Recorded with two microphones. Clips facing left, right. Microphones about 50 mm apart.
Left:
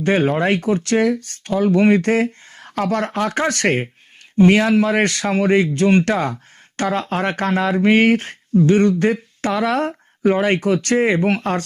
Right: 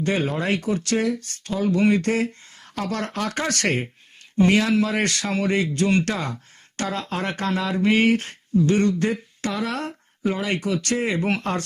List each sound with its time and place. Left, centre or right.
0.0 s speech: left